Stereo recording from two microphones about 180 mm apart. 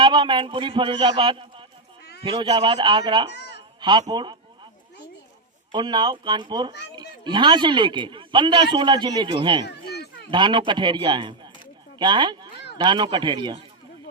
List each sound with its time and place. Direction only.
0.0 s speech: 25° right (ahead or behind)
3.3 s a sound: 70° left (ahead or behind)
3.8 s speech: 25° right (ahead or behind)
5.7 s speech: 25° right (ahead or behind)
9.6 s speech: 65° left (ahead or behind)
10.3 s speech: 25° right (ahead or behind)